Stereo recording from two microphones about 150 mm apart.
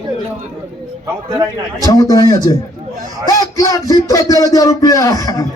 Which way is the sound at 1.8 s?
25° left (ahead or behind).